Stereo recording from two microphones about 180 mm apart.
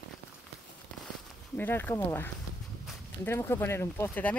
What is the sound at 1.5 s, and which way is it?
Speech, 10° left (ahead or behind).